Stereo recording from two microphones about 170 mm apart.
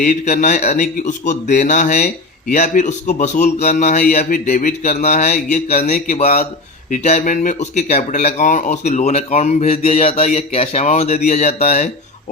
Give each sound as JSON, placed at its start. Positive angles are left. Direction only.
{"t": 0.3, "sound": "speech", "side_deg": 45}